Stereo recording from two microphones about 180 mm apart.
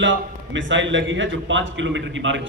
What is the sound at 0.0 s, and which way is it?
A man's voice, 90° right.